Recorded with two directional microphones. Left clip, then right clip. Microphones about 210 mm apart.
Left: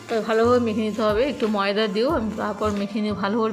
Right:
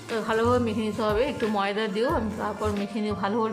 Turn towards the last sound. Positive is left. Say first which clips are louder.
# left 3 dB
turn(degrees=15)  # may be behind; listen again after turning